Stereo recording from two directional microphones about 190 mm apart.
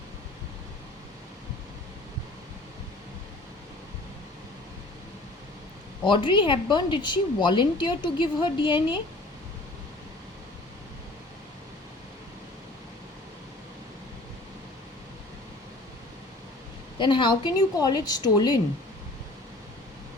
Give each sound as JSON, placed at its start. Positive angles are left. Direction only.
{"t": 6.1, "sound": "a woman's voice", "side_deg": 25}
{"t": 17.0, "sound": "a woman's voice", "side_deg": 25}